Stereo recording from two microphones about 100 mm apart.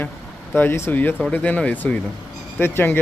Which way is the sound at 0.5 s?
20° left (ahead or behind).